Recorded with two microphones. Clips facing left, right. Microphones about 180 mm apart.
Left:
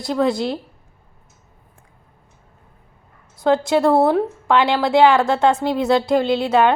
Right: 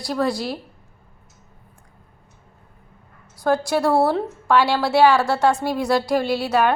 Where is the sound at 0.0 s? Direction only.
20° left (ahead or behind).